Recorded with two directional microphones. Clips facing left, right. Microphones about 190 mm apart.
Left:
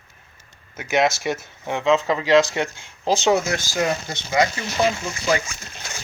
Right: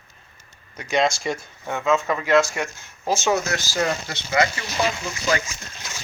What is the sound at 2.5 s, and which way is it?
Speech, 30° left (ahead or behind).